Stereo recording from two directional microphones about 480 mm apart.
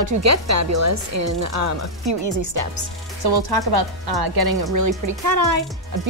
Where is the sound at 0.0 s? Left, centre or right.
Right.